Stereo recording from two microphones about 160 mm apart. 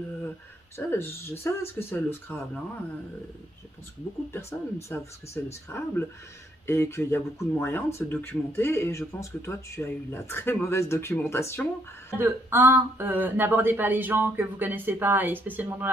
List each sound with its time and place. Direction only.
0.7 s speech: 15° left (ahead or behind)
4.3 s speech: 15° left (ahead or behind)
12.2 s speech: 15° right (ahead or behind)